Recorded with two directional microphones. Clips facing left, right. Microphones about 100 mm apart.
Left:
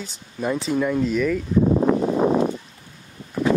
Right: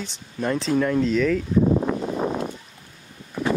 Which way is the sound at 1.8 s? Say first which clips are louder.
Left 6 dB; 80° left.